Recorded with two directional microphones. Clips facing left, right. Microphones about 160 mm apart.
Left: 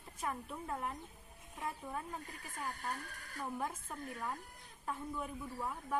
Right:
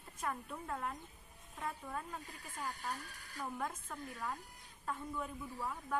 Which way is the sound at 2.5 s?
50° left (ahead or behind).